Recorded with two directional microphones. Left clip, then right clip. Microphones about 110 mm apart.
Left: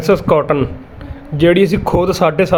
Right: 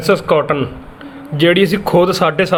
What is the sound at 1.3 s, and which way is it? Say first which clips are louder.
Speech: left 1 dB; 20° left (ahead or behind).